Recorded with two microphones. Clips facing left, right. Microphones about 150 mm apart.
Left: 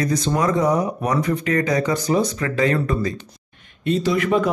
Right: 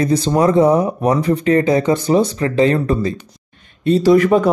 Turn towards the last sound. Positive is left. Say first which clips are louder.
# right 8 dB
turn(degrees=-40)  # may be behind; listen again after turning